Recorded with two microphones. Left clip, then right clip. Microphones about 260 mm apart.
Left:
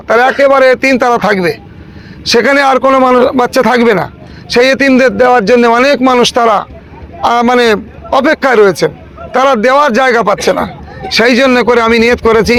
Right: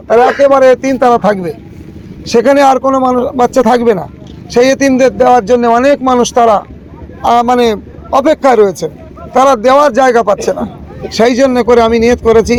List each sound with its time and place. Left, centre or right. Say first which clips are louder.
0.1 s a man's voice: even; left
0.9 s speech: right 1 dB; left
1.3 s a man's voice: left 2 dB; left
7.2 s a man's voice: even; left
10.1 s speech: even; left
10.3 s a man's voice: left 3 dB; left